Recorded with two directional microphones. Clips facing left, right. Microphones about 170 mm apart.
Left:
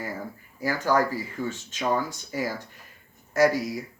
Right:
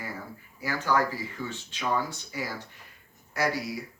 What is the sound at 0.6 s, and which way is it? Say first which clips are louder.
Speech: left 3 dB; 45° left (ahead or behind).